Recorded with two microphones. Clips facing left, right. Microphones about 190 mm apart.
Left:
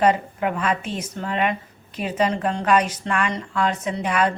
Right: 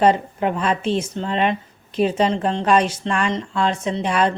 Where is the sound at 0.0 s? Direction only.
30° right (ahead or behind).